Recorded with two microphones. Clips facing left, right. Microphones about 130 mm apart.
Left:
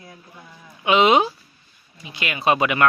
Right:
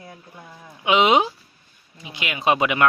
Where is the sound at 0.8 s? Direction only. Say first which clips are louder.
Left 1 dB; 15° right (ahead or behind).